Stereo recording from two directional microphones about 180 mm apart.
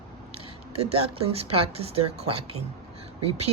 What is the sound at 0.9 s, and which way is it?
A woman's voice, 35° right (ahead or behind).